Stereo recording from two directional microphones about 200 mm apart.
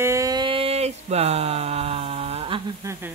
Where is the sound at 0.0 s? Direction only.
15° right (ahead or behind).